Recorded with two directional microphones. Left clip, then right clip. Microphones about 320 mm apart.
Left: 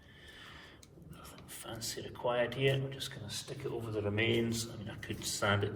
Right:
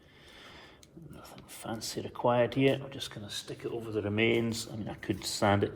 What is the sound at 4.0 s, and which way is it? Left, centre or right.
Speech, right.